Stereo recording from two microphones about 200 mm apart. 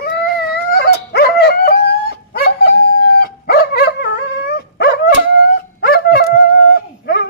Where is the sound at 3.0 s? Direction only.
50° left (ahead or behind).